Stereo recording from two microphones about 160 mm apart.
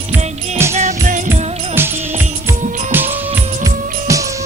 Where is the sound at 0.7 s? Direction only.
45° right (ahead or behind).